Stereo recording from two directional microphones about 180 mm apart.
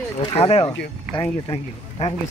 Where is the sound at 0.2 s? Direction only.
30° left (ahead or behind).